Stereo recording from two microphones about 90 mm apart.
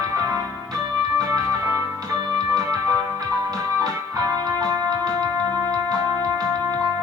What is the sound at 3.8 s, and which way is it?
Music, 45° right (ahead or behind).